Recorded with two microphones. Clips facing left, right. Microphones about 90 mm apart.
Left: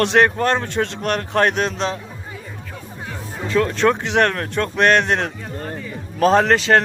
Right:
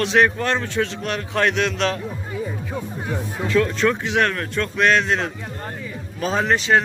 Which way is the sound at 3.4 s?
30° left (ahead or behind).